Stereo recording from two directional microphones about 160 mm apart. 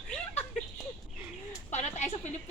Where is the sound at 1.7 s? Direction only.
45° left (ahead or behind).